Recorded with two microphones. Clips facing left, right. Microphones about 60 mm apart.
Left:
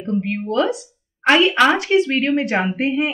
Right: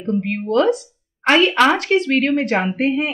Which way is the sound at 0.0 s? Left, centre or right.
Centre.